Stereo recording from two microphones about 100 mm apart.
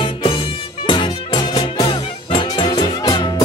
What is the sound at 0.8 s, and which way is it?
Music, 50° left (ahead or behind).